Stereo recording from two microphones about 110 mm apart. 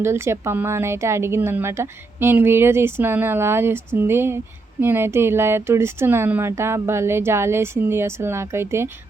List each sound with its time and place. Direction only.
0.0 s speech: 25° right (ahead or behind)